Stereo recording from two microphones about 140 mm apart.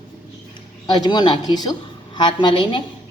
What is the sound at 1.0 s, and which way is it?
A woman's voice, 30° left (ahead or behind).